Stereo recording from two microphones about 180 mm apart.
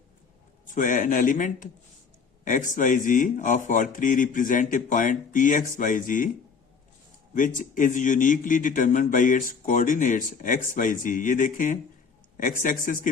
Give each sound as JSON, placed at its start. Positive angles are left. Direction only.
{"t": 0.7, "sound": "a man's voice", "side_deg": 45}
{"t": 7.3, "sound": "a man's voice", "side_deg": 45}